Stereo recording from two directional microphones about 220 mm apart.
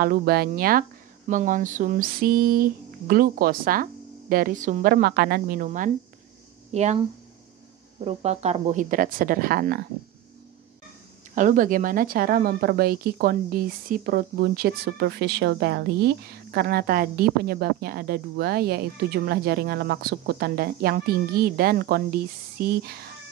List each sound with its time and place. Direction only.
0.0 s a woman's voice: 40° right (ahead or behind)
8.0 s a woman's voice: 30° right (ahead or behind)
11.3 s speech: 35° right (ahead or behind)